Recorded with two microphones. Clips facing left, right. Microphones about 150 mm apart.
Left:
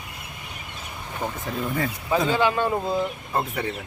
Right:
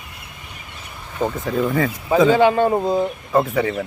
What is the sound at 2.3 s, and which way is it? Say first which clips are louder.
Speech: right 7 dB; 50° right (ahead or behind).